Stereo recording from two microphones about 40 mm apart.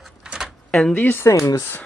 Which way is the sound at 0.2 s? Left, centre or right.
Centre.